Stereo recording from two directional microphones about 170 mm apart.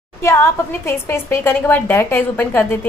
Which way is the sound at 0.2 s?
15° left (ahead or behind).